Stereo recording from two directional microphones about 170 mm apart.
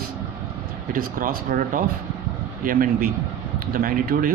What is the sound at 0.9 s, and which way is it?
Speech, 55° right (ahead or behind).